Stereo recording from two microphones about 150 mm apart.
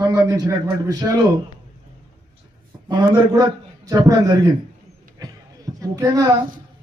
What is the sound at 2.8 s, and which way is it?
A man's voice, 25° right (ahead or behind).